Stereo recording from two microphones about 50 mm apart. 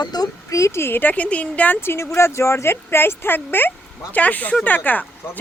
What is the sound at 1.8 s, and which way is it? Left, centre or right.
Speech, left.